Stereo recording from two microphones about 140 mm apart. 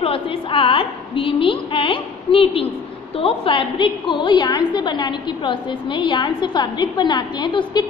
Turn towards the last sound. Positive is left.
turn(degrees=35)  # may be behind; listen again after turning